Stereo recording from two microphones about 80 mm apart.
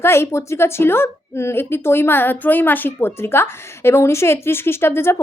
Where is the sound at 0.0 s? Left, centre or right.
Left.